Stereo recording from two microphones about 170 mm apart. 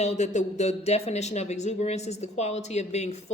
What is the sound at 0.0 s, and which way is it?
Speech, 40° left (ahead or behind).